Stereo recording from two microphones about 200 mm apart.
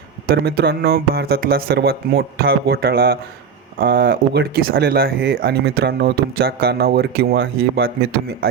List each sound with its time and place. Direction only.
0.3 s speech: 50° right (ahead or behind)